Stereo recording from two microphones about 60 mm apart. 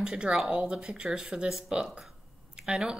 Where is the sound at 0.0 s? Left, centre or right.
Centre.